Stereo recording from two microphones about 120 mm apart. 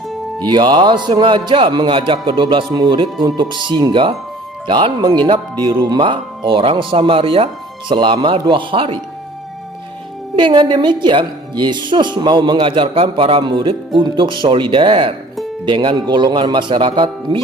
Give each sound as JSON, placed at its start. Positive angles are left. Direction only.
{"t": 0.4, "sound": "a woman's voice", "side_deg": -40}
{"t": 10.3, "sound": "a woman's voice", "side_deg": -40}